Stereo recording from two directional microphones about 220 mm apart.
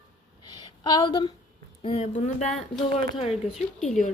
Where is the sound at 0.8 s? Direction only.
20° left (ahead or behind).